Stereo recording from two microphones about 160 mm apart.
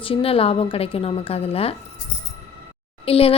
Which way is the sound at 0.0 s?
35° left (ahead or behind).